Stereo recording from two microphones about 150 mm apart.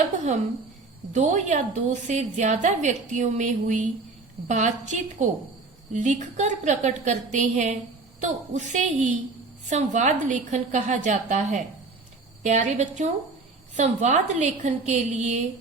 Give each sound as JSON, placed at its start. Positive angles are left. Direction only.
{"t": 1.1, "sound": "a woman's voice", "side_deg": -55}